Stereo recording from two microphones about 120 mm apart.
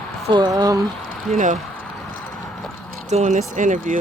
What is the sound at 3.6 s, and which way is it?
Speech, 90° right.